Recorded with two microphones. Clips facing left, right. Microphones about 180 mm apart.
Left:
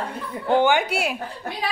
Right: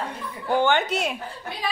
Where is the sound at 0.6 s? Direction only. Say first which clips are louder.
Left 2 dB; 10° left (ahead or behind).